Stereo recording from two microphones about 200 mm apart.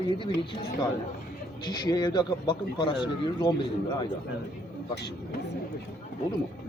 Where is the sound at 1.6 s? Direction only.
20° left (ahead or behind).